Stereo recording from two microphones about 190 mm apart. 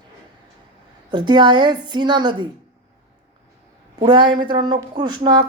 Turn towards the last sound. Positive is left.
turn(degrees=-25)  # may be behind; listen again after turning